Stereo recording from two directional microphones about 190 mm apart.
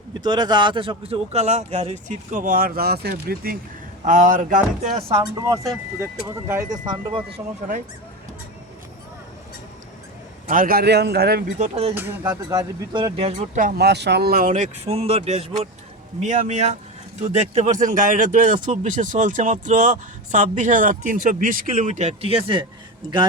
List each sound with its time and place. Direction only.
0.1 s a man's voice: 20° right (ahead or behind); by 3.6 s 50° right (ahead or behind)
4.0 s a man's voice: 40° right (ahead or behind)
5.3 s speech: 15° right (ahead or behind)
10.5 s a man's voice: 50° right (ahead or behind)
11.6 s a man's voice: 35° right (ahead or behind)
11.9 s speech: 10° right (ahead or behind); by 13.6 s 30° right (ahead or behind)
13.6 s a man's voice: 50° right (ahead or behind); by 22.6 s 30° right (ahead or behind)